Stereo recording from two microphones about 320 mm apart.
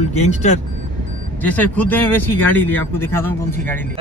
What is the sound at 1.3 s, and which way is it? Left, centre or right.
Speech, centre.